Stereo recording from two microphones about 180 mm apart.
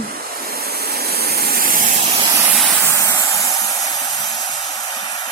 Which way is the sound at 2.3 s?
15° right (ahead or behind).